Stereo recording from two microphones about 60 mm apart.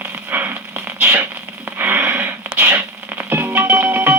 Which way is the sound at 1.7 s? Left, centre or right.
Right.